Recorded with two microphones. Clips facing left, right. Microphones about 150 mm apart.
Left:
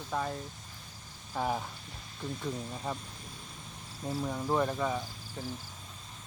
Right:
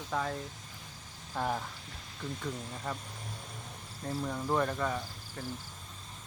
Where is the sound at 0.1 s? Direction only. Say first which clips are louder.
Even; 5° left (ahead or behind).